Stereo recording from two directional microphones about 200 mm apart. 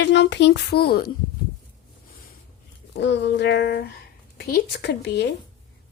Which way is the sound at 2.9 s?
60° left (ahead or behind).